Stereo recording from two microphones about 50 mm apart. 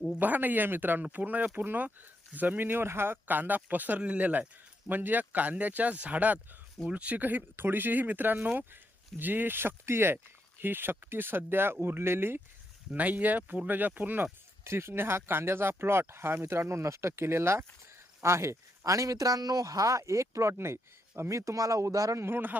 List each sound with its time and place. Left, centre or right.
0.2 s speech: right
3.2 s speech: right
12.9 s speech: right
14.6 s speech: right
21.2 s speech: right
22.3 s speech: right